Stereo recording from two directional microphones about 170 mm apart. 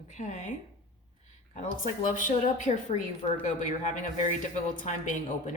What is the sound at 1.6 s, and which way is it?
A woman's voice, 50° left (ahead or behind).